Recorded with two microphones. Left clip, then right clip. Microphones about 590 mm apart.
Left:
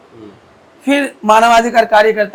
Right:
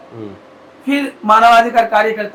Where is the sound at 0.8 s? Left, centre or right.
Left.